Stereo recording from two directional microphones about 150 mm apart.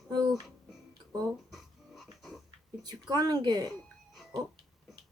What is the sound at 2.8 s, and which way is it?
Speech, 25° right (ahead or behind).